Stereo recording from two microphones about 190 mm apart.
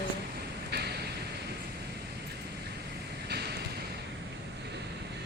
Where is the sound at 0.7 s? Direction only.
60° right (ahead or behind).